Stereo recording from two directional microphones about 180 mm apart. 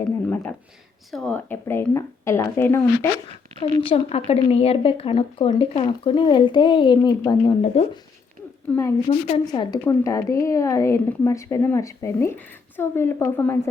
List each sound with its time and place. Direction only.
1.1 s a woman's voice: 5° left (ahead or behind)
3.2 s a woman's voice: 30° left (ahead or behind)
7.8 s a woman's voice: 35° left (ahead or behind)
8.7 s a woman's voice: 5° left (ahead or behind)
9.0 s a woman's voice: 35° left (ahead or behind)
9.5 s a woman's voice: 25° left (ahead or behind)